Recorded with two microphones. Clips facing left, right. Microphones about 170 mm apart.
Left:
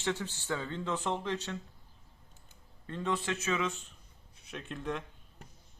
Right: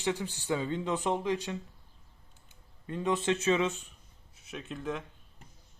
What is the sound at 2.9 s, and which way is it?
Speech, 15° right (ahead or behind).